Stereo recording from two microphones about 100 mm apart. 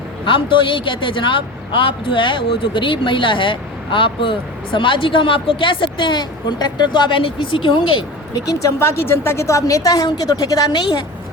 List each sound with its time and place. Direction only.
0.3 s a man's voice: 55° left (ahead or behind)
8.4 s a woman's voice: 30° left (ahead or behind); by 11.0 s 45° left (ahead or behind)